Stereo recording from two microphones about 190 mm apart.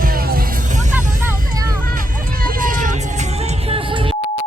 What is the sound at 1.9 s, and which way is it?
Music, 50° right (ahead or behind).